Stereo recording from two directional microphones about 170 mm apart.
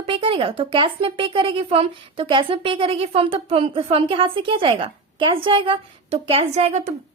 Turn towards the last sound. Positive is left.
turn(degrees=-40)  # may be behind; listen again after turning